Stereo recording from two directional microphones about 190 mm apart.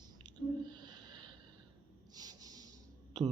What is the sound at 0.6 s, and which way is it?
Snort, 25° right (ahead or behind).